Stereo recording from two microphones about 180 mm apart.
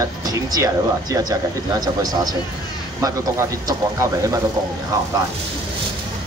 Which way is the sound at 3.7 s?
20° right (ahead or behind).